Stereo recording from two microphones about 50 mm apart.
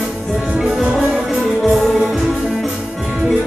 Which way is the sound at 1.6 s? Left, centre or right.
Centre.